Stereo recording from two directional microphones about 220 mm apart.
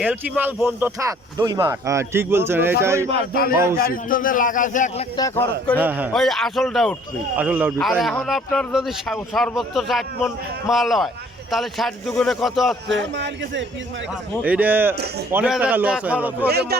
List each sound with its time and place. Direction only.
0.0 s speech: 5° right (ahead or behind)
3.8 s a man's voice: 40° left (ahead or behind)
5.1 s a man's voice: 15° left (ahead or behind)
5.8 s a man's voice: 5° right (ahead or behind)
12.9 s speech: 55° right (ahead or behind)
14.4 s speech: 5° right (ahead or behind)
16.5 s speech: 45° right (ahead or behind)